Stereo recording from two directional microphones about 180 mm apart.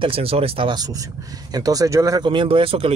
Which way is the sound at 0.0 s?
30° right (ahead or behind).